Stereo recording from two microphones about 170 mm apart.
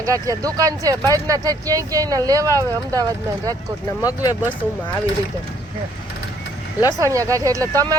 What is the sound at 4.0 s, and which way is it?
Speech, 20° left (ahead or behind).